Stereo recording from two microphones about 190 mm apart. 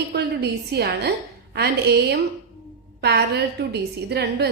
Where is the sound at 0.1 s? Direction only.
60° right (ahead or behind).